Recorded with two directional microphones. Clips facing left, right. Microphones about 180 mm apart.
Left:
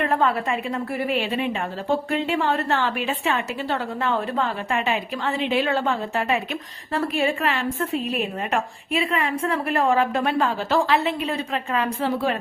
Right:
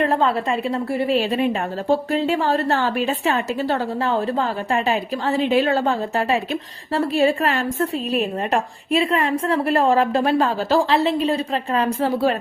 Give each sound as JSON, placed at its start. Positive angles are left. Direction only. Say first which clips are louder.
{"t": 0.0, "sound": "a woman's voice", "louder": "right 3 dB", "side_deg": -30}